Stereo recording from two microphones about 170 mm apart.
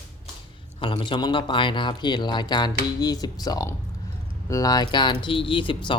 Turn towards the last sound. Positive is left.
turn(degrees=30)  # may be behind; listen again after turning